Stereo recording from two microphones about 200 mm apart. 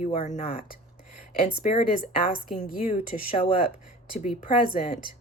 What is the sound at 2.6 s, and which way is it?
Speech, 40° left (ahead or behind).